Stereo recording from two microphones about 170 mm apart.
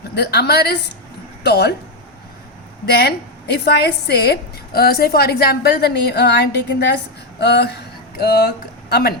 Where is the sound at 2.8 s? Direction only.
70° left (ahead or behind).